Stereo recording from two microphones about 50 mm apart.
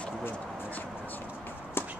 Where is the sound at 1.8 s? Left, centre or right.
Left.